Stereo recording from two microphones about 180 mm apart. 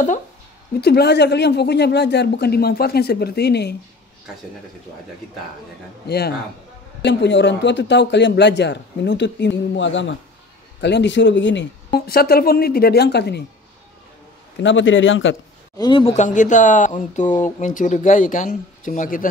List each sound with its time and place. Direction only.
0.7 s speech: 65° left (ahead or behind)
6.0 s speech: 60° left (ahead or behind)
7.0 s speech: 75° left (ahead or behind); by 10.1 s 90° left
10.8 s speech: 75° left (ahead or behind)
14.6 s a man's voice: 90° left
15.8 s speech: 25° left (ahead or behind)
16.2 s speech: 45° left (ahead or behind)